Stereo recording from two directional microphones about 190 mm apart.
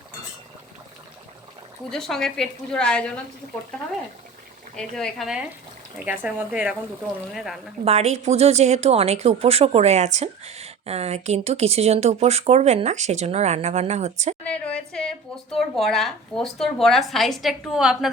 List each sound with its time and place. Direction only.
1.9 s speech: 5° left (ahead or behind)
4.8 s speech: centre (ahead or behind)
7.9 s a woman's voice: 35° right (ahead or behind)
14.4 s speech: 5° left (ahead or behind)